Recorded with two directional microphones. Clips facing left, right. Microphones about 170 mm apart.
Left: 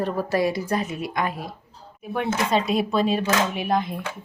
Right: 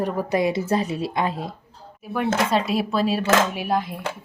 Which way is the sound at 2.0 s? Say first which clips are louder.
Right 2 dB; centre (ahead or behind).